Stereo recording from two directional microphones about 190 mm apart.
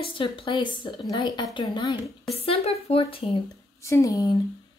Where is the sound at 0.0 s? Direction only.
25° left (ahead or behind).